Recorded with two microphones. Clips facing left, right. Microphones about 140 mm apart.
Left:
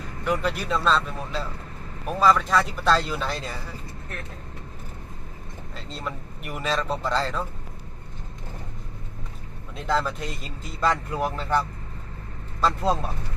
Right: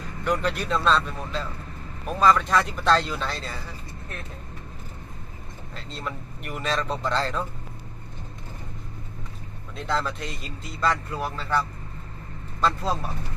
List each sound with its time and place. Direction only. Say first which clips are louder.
0.3 s speech: even; 5° left (ahead or behind)
5.7 s speech: even; centre (ahead or behind)
9.7 s speech: left 2 dB; 5° left (ahead or behind)